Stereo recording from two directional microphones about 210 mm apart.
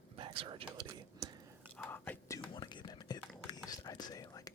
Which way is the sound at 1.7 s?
10° left (ahead or behind).